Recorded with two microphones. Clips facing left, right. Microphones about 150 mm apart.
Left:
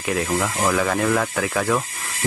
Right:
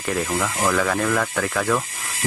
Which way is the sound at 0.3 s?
5° left (ahead or behind).